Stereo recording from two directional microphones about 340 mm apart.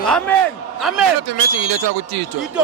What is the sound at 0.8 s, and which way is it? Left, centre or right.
Speech, centre.